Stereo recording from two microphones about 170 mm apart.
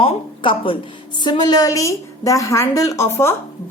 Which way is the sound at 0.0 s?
30° left (ahead or behind).